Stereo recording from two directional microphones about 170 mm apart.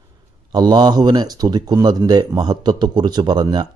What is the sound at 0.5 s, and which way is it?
Speech, 25° right (ahead or behind).